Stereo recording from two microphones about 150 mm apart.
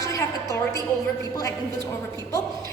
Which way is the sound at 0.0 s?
20° left (ahead or behind).